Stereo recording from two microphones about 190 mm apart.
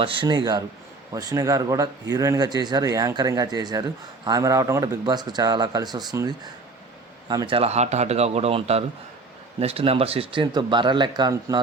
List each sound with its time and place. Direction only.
0.0 s speech: 25° right (ahead or behind)